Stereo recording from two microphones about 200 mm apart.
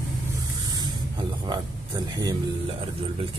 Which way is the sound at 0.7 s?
20° right (ahead or behind).